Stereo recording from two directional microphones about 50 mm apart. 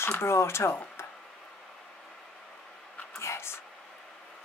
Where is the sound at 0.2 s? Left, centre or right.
Left.